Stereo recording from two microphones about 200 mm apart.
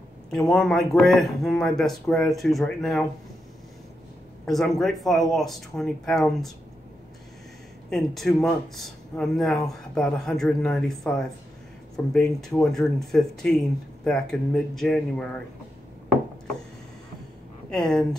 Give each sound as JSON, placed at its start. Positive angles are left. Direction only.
{"t": 0.5, "sound": "speech", "side_deg": 0}
{"t": 4.5, "sound": "speech", "side_deg": 0}
{"t": 7.9, "sound": "speech", "side_deg": 0}
{"t": 17.6, "sound": "speech", "side_deg": 0}